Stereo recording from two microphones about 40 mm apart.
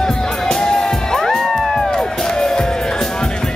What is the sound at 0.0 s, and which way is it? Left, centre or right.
Music, centre.